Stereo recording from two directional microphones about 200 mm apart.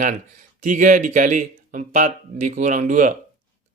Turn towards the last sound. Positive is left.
turn(degrees=-40)  # may be behind; listen again after turning